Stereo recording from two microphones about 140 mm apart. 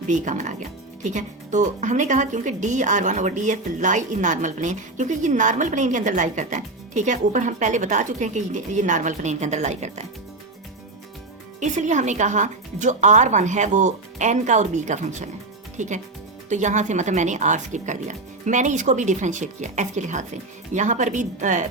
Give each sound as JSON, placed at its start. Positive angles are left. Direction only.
{"t": 0.1, "sound": "speech", "side_deg": -60}
{"t": 11.6, "sound": "speech", "side_deg": -60}
{"t": 16.5, "sound": "speech", "side_deg": -60}